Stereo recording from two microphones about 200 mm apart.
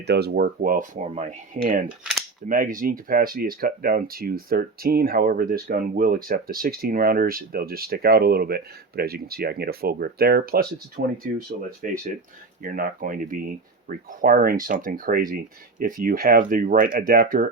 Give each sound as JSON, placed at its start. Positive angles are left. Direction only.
{"t": 0.0, "sound": "speech", "side_deg": -55}
{"t": 2.4, "sound": "cap gun", "side_deg": -40}
{"t": 2.7, "sound": "speech", "side_deg": -45}